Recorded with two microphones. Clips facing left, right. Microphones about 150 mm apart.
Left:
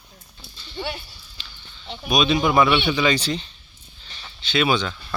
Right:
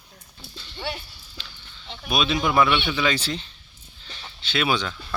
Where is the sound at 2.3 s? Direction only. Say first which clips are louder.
Left 2 dB; 10° left (ahead or behind).